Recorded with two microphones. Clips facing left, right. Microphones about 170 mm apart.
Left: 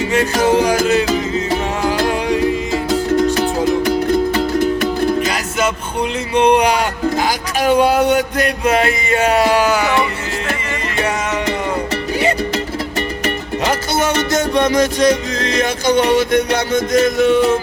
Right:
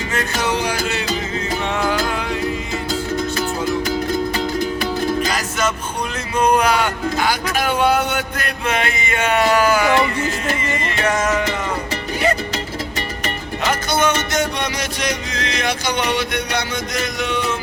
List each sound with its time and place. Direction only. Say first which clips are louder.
1.5 s music: left 3 dB; 30° left (ahead or behind)
6.4 s speech: left 2 dB; 35° left (ahead or behind)
14.7 s speech: left 11 dB; 40° left (ahead or behind)
16.1 s music: left 8 dB; 45° left (ahead or behind)